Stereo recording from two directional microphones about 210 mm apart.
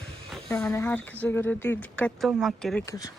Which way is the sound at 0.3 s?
Centre (ahead or behind).